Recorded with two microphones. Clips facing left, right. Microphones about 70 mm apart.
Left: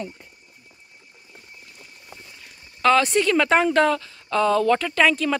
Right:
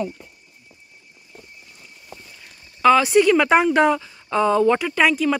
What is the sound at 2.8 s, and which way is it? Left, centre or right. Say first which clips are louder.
A woman's voice: right 4 dB; centre.